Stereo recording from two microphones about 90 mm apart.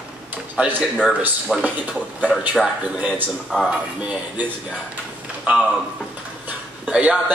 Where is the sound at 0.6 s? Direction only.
15° right (ahead or behind).